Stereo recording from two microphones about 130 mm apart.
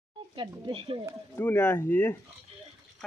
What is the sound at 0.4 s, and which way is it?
Speech, 40° right (ahead or behind).